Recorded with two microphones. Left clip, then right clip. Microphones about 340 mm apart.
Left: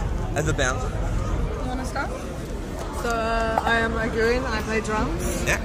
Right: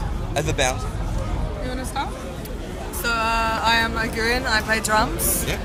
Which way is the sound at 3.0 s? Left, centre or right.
Right.